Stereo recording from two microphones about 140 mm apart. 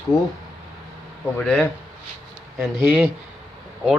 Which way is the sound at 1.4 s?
10° left (ahead or behind).